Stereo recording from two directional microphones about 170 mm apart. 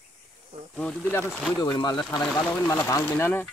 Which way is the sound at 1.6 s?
25° left (ahead or behind).